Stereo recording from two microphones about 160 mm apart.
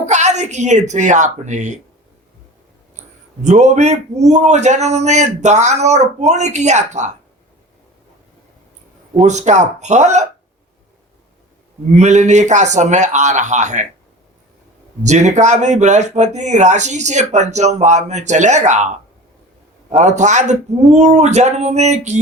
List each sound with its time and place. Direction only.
0.0 s speech: 45° right (ahead or behind)
3.4 s speech: 45° right (ahead or behind)
9.2 s speech: 45° right (ahead or behind)
11.9 s speech: 45° right (ahead or behind)
15.0 s speech: 45° right (ahead or behind)